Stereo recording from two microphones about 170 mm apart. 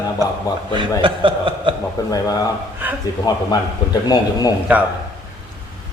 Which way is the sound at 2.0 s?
20° left (ahead or behind).